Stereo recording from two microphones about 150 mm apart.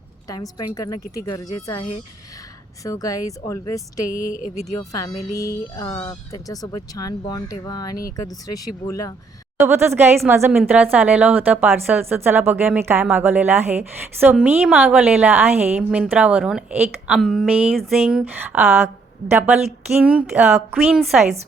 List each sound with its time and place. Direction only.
0.3 s speech: 25° left (ahead or behind)
4.4 s speech: 50° left (ahead or behind)
4.8 s speech: 20° left (ahead or behind)
9.6 s a woman's voice: 15° right (ahead or behind)